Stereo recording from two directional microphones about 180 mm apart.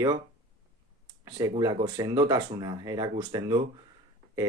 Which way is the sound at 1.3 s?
20° right (ahead or behind).